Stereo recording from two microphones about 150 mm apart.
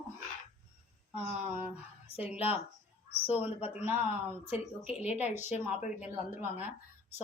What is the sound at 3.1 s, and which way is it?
Speech, 40° left (ahead or behind).